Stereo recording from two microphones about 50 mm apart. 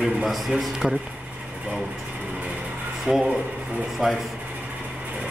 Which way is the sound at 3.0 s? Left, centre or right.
Centre.